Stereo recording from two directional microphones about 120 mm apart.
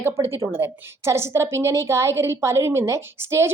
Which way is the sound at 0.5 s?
20° right (ahead or behind).